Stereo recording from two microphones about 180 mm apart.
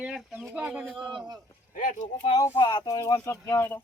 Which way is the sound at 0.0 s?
10° right (ahead or behind).